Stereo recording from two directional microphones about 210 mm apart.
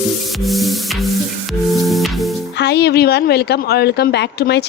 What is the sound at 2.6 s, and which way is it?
A woman's voice, 55° left (ahead or behind).